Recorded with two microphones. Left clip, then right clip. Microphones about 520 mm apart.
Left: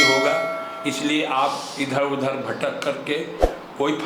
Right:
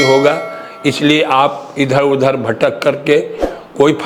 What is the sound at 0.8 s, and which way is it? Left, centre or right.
A man's voice, right.